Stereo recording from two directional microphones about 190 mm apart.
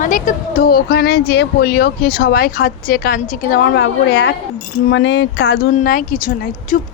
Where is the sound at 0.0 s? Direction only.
45° left (ahead or behind); by 5.5 s 60° left (ahead or behind).